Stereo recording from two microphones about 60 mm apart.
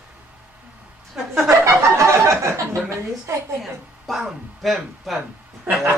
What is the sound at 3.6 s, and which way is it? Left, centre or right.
A woman's voice, centre.